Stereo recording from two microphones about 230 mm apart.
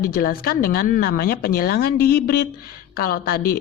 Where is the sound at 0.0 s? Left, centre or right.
Left.